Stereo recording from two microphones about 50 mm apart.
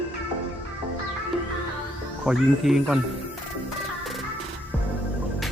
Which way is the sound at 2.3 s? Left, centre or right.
Centre.